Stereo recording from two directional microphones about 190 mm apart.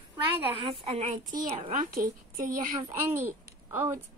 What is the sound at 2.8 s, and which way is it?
Speech, 15° right (ahead or behind).